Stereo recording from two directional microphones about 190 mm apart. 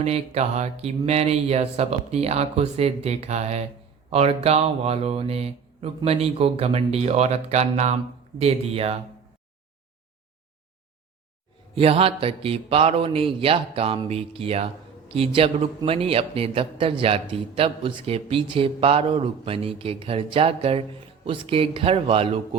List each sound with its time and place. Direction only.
0.0 s speech: 35° right (ahead or behind)
11.7 s a man's voice: 30° right (ahead or behind)